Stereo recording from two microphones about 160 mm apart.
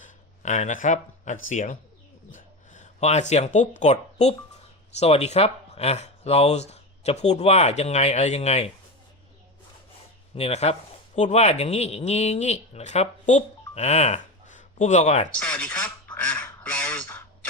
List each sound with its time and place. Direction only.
0.0 s speech: 50° left (ahead or behind)
10.3 s speech: 40° left (ahead or behind)
15.4 s quack: 5° left (ahead or behind)